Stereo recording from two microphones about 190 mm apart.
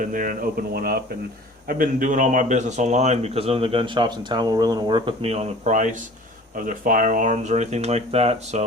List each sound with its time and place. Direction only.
0.0 s speech: 45° right (ahead or behind)